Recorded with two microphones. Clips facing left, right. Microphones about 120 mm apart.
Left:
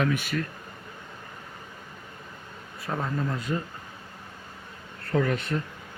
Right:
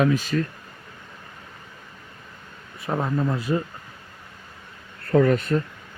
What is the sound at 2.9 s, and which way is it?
Speech, 25° right (ahead or behind).